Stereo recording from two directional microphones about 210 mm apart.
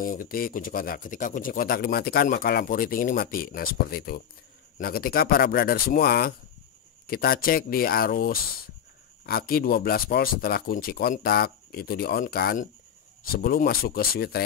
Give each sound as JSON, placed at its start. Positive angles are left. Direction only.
{"t": 0.0, "sound": "speech", "side_deg": 40}